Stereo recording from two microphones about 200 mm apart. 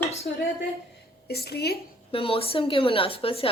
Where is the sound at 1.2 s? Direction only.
55° left (ahead or behind).